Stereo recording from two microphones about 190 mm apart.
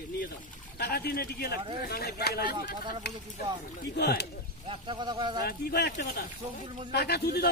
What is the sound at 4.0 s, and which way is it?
Speech, 60° left (ahead or behind).